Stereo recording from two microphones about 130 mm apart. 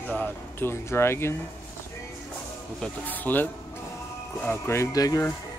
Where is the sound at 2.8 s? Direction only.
15° left (ahead or behind); by 5.3 s 30° left (ahead or behind).